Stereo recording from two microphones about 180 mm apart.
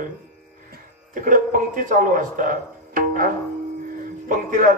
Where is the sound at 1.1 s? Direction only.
50° right (ahead or behind).